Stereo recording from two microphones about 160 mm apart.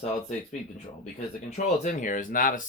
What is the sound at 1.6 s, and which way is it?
Speech, 50° left (ahead or behind).